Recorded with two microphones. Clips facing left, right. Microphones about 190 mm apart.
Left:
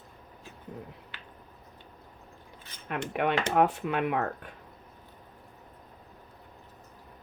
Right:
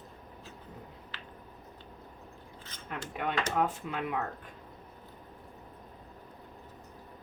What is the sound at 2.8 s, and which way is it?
Cutlery, 70° left (ahead or behind).